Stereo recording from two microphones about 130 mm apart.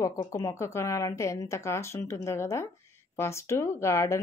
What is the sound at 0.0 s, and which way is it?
A woman's voice, 25° left (ahead or behind).